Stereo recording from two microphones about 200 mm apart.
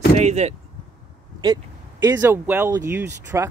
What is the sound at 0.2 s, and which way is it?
Speech, 35° right (ahead or behind).